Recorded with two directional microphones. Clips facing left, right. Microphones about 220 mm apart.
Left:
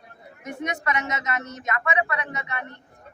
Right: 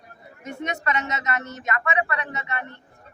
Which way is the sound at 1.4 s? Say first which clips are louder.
Right 1 dB; centre (ahead or behind).